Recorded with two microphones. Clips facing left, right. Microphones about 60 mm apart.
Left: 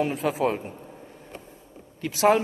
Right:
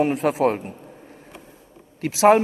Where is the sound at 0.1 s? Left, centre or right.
Right.